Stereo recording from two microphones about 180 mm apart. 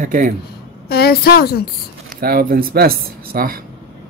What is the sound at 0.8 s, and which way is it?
Speech, 60° left (ahead or behind).